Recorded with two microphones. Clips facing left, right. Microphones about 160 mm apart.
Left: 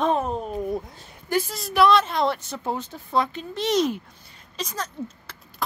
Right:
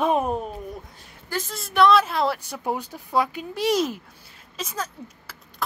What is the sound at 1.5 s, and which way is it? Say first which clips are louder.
A woman's voice: right 1 dB; centre (ahead or behind).